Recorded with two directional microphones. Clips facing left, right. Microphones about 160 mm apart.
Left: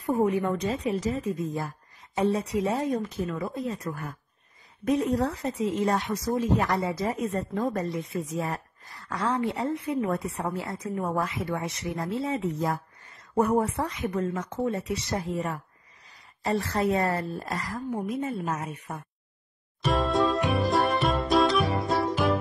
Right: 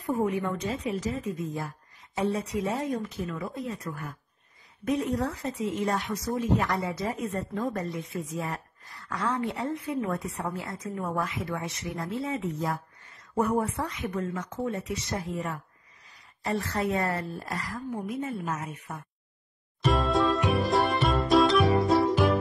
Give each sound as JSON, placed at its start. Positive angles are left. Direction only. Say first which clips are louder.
{"t": 0.0, "sound": "a woman's voice", "louder": "left 3 dB", "side_deg": 35}
{"t": 5.0, "sound": "a woman's voice", "louder": "left 3 dB", "side_deg": 30}
{"t": 19.8, "sound": "music", "louder": "even", "side_deg": 0}